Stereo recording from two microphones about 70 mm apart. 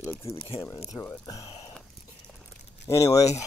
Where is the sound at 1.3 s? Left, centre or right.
Left.